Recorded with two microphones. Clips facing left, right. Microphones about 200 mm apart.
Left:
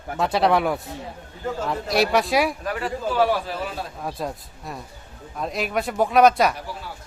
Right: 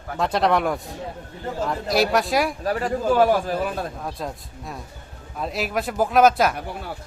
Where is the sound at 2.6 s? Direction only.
45° right (ahead or behind).